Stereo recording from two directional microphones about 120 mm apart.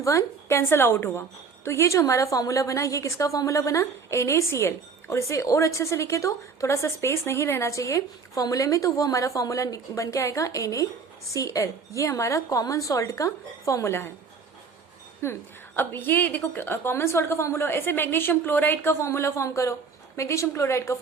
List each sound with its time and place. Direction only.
0.0 s a woman's voice: 25° left (ahead or behind)
15.2 s a woman's voice: 20° left (ahead or behind)